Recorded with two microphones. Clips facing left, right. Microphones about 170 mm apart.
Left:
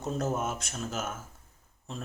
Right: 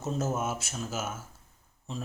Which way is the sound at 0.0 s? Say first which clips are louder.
Even; 5° right (ahead or behind).